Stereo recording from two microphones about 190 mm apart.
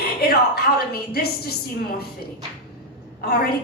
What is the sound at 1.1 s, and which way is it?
Speech, 55° left (ahead or behind).